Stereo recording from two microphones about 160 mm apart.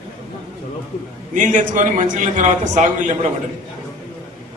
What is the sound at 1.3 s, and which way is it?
A man's voice, 50° right (ahead or behind).